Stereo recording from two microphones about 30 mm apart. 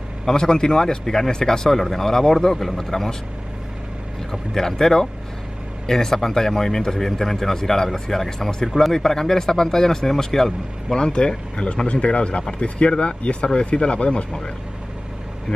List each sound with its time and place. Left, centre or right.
0.4 s speech: left
4.6 s speech: centre
11.0 s speech: left